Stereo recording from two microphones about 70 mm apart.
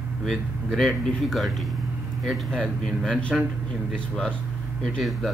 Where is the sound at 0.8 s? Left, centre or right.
Centre.